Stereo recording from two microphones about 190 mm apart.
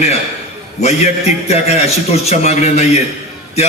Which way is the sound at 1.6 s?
35° left (ahead or behind).